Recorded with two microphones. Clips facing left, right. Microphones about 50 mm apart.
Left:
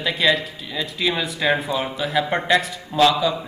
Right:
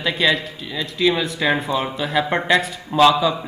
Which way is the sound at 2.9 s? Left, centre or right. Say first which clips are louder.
Right 3 dB; centre.